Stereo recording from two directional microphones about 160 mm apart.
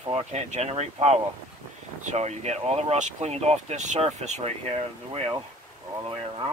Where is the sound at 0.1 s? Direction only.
45° right (ahead or behind).